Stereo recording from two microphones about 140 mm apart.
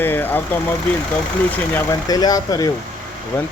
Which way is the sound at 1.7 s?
25° left (ahead or behind).